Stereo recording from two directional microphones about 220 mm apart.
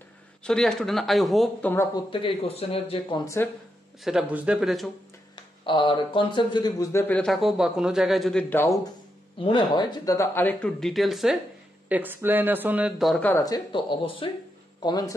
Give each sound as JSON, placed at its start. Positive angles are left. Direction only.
{"t": 0.4, "sound": "a man's voice", "side_deg": 5}
{"t": 4.0, "sound": "speech", "side_deg": 0}
{"t": 5.6, "sound": "a man's voice", "side_deg": 20}
{"t": 9.4, "sound": "a man's voice", "side_deg": 20}